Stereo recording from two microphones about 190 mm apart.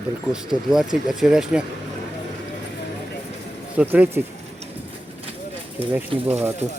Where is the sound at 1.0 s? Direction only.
5° right (ahead or behind).